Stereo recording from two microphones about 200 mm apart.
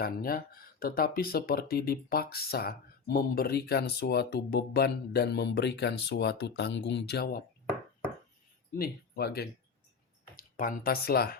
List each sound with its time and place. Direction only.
0.0 s speech: 45° left (ahead or behind)
8.8 s speech: 50° left (ahead or behind)